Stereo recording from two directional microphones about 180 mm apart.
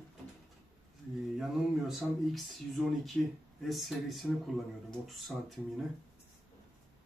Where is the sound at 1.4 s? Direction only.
Centre (ahead or behind).